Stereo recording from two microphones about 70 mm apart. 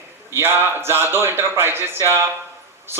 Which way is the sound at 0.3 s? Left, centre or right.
Right.